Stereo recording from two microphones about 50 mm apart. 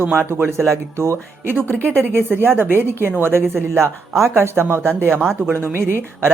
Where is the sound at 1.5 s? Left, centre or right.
Right.